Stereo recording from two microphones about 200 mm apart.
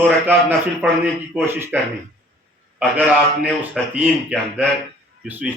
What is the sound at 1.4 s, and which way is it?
Speech, 10° right (ahead or behind).